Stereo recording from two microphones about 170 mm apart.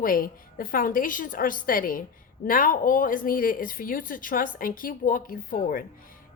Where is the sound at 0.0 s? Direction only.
55° left (ahead or behind).